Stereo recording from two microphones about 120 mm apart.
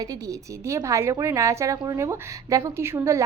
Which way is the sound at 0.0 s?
30° right (ahead or behind).